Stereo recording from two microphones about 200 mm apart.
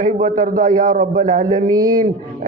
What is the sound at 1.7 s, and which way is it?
Speech, 20° right (ahead or behind).